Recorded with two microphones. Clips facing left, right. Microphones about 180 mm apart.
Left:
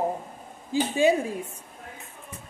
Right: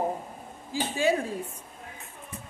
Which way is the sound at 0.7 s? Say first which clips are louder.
Left 5 dB; 20° left (ahead or behind).